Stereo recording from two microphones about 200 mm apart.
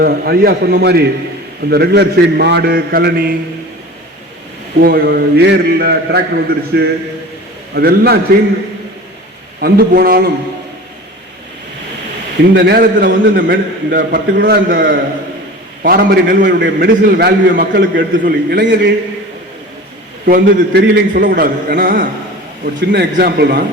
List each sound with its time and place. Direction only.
0.0 s a man's voice: 50° right (ahead or behind)
4.8 s a man's voice: 50° right (ahead or behind)
9.6 s a man's voice: 50° right (ahead or behind)
12.5 s a man's voice: 55° right (ahead or behind)
20.2 s a man's voice: 45° right (ahead or behind)